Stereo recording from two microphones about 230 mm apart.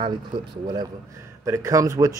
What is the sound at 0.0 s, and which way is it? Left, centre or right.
Speech, centre.